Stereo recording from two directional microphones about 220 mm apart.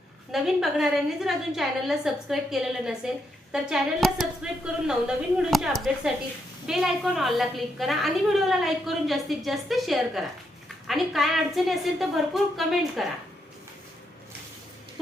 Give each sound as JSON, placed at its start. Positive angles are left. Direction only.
{"t": 0.3, "sound": "a woman's voice", "side_deg": 0}